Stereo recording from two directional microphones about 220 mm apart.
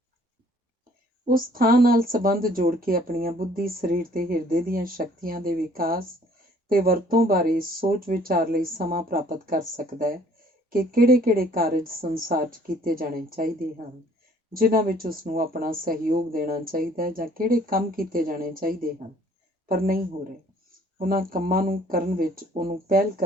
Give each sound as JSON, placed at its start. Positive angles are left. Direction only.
{"t": 1.2, "sound": "speech", "side_deg": -40}
{"t": 21.0, "sound": "speech", "side_deg": -40}